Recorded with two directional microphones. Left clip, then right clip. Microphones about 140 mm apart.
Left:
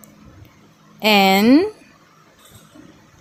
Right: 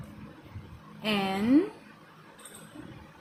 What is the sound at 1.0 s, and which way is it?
Speech, 90° left.